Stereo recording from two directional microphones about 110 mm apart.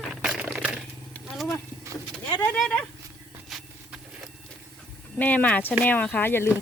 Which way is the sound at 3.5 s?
Centre (ahead or behind).